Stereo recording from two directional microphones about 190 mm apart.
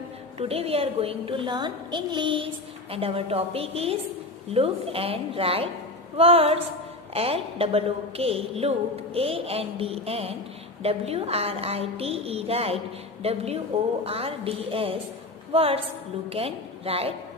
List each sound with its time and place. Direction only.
0.4 s a woman's voice: 30° right (ahead or behind)